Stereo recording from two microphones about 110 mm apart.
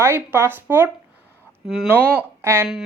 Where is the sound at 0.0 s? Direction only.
20° right (ahead or behind).